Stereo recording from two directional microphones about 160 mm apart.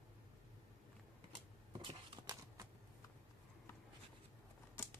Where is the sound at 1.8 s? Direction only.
25° right (ahead or behind).